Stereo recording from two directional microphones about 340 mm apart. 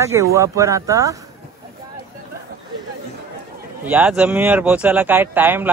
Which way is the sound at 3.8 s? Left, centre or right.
Centre.